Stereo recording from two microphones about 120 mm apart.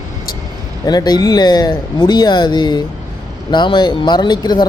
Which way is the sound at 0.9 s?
35° left (ahead or behind).